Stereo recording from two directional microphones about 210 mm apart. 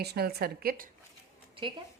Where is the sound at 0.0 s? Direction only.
50° right (ahead or behind).